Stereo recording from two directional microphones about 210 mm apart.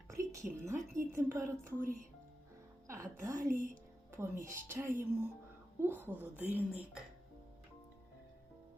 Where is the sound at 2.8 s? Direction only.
15° right (ahead or behind).